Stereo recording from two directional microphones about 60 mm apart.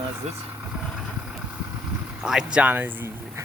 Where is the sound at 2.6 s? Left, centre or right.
Right.